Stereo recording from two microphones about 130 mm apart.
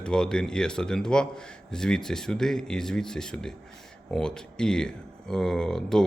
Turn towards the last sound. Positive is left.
turn(degrees=5)  # may be behind; listen again after turning